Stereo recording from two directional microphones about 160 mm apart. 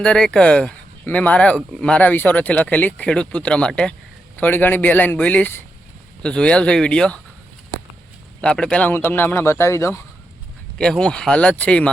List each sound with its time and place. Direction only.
0.0 s speech: 5° left (ahead or behind)
8.4 s speech: 5° left (ahead or behind)
10.8 s speech: 5° left (ahead or behind)